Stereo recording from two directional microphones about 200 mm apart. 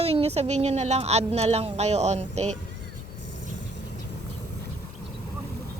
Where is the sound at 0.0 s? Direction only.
30° right (ahead or behind).